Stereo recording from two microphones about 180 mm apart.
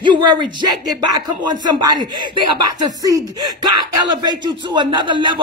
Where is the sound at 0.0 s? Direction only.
25° right (ahead or behind).